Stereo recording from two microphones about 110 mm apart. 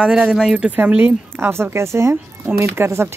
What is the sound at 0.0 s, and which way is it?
Speech, 5° right (ahead or behind).